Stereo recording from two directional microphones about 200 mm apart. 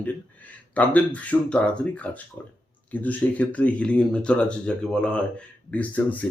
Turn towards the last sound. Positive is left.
turn(degrees=10)  # may be behind; listen again after turning